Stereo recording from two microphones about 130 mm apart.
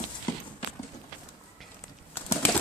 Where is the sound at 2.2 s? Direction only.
15° left (ahead or behind).